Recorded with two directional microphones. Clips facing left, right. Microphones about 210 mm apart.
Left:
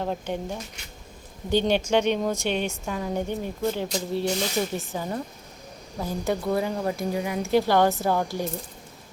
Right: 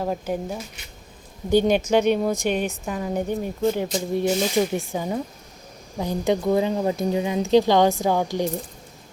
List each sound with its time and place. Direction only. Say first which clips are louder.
0.0 s speech: right 3 dB; 5° right (ahead or behind)